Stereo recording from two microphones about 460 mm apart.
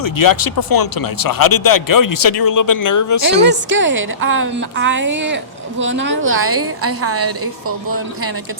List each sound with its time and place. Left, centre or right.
0.0 s speech: left
3.2 s a woman's voice: right